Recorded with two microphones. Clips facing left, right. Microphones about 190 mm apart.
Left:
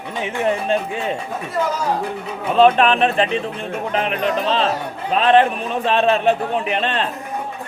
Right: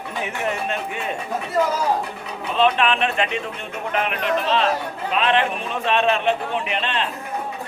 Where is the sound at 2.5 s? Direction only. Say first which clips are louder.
Left 6 dB; 45° left (ahead or behind).